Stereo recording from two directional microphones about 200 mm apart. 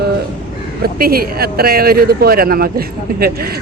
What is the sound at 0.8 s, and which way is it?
Speech, 50° right (ahead or behind).